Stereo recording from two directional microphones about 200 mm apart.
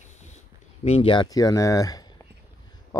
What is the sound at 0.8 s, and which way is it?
Speech, 30° left (ahead or behind).